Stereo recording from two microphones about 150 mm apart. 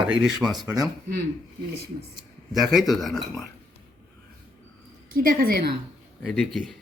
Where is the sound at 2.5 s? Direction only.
Centre (ahead or behind).